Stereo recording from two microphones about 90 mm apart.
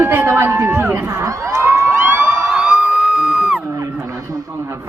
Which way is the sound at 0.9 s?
30° right (ahead or behind).